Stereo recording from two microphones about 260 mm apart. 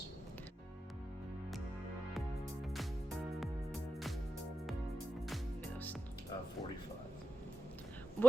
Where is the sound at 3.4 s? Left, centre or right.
Centre.